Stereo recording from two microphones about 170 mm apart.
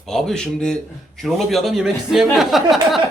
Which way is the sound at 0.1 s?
Centre (ahead or behind).